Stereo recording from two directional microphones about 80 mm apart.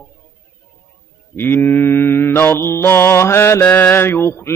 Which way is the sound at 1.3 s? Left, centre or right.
Left.